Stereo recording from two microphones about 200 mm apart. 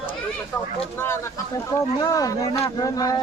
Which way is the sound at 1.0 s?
10° left (ahead or behind).